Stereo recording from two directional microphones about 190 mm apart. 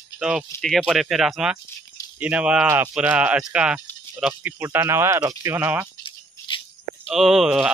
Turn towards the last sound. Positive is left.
turn(degrees=-5)  # may be behind; listen again after turning